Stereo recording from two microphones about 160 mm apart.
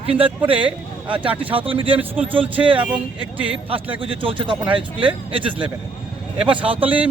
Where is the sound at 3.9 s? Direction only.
35° right (ahead or behind).